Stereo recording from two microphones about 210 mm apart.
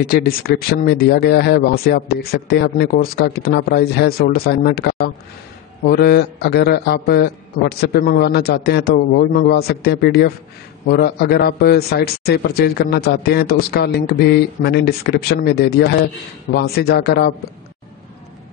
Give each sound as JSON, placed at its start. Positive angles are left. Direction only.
{"t": 0.0, "sound": "a man's voice", "side_deg": 45}